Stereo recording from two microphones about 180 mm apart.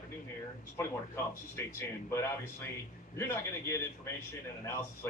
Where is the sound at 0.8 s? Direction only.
15° left (ahead or behind).